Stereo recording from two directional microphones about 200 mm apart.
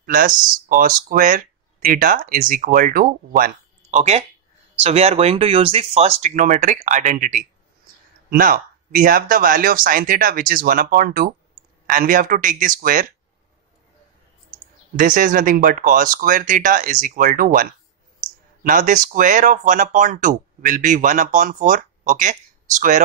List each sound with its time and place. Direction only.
0.0 s speech: 45° right (ahead or behind)
15.0 s speech: 40° right (ahead or behind)